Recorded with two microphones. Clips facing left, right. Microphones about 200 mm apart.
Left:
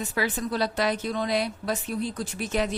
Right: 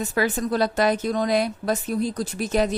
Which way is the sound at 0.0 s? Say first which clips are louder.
Right 5 dB; 45° right (ahead or behind).